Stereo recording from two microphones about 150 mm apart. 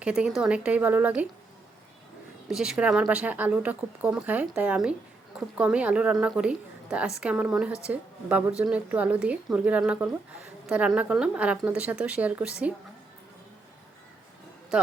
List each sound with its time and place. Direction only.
0.0 s a woman's voice: 5° right (ahead or behind)
2.5 s a woman's voice: 5° right (ahead or behind)